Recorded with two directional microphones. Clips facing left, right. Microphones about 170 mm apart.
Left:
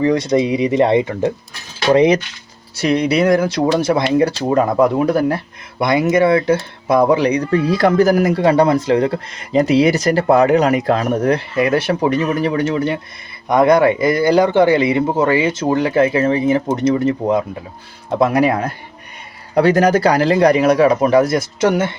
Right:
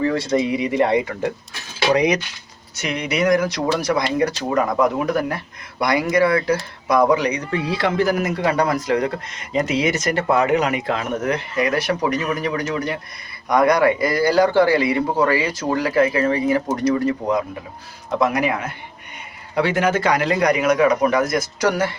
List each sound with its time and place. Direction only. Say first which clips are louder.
0.0 s a man's voice: left 5 dB; 20° left (ahead or behind)